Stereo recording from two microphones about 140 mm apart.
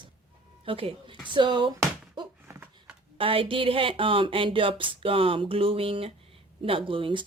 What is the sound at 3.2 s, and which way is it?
Speech, 40° right (ahead or behind).